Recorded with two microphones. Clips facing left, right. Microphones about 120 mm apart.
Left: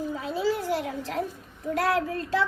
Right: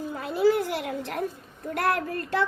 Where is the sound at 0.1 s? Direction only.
65° right (ahead or behind).